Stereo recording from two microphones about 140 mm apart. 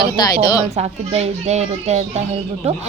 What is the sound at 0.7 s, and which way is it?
Speech, 50° right (ahead or behind).